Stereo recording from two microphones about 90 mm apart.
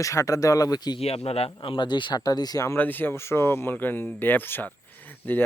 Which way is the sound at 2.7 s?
20° left (ahead or behind).